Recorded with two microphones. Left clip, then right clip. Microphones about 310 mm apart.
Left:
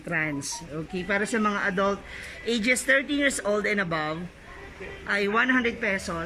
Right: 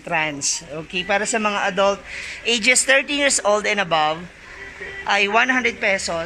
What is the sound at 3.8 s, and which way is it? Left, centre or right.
Speech, centre.